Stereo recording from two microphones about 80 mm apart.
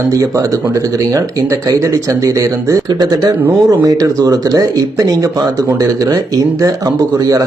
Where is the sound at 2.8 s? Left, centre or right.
Right.